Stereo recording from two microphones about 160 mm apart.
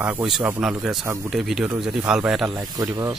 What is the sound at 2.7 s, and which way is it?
Speech, 20° right (ahead or behind).